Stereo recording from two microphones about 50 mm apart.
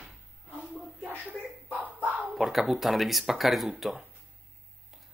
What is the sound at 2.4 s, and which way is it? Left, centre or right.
Speech, centre.